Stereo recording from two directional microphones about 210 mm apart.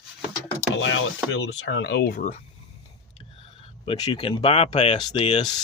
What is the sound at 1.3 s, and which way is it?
Speech, 60° left (ahead or behind).